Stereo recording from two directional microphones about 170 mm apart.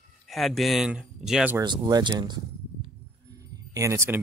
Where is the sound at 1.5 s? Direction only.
25° right (ahead or behind).